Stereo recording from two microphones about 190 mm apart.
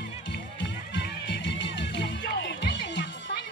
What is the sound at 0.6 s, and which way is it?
Music, 65° left (ahead or behind).